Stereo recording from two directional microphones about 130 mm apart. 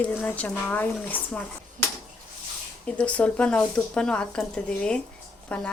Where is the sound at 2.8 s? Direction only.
10° left (ahead or behind).